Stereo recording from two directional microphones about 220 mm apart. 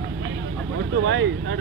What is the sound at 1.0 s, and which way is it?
Speech, 55° right (ahead or behind).